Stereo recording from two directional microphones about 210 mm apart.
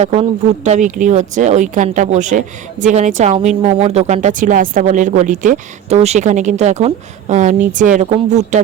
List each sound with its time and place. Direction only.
0.0 s speech: 35° right (ahead or behind)